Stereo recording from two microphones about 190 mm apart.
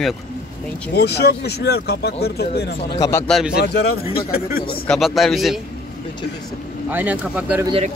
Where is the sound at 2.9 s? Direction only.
15° left (ahead or behind).